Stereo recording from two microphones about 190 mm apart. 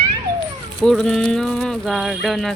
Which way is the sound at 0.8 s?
5° left (ahead or behind).